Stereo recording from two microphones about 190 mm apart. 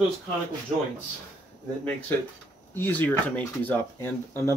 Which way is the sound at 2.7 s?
10° left (ahead or behind).